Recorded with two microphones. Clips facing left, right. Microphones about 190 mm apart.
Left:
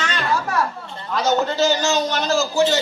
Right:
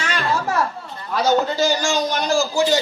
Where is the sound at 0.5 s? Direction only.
25° right (ahead or behind).